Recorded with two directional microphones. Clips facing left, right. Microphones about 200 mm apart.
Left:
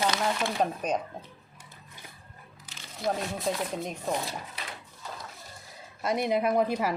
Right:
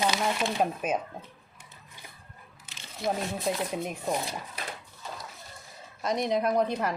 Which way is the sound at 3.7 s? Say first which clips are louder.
Right 1 dB; 10° right (ahead or behind).